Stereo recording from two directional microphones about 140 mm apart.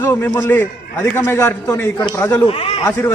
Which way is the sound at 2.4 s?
40° left (ahead or behind).